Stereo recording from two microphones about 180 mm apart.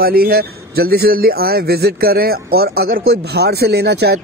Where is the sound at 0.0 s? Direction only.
55° right (ahead or behind).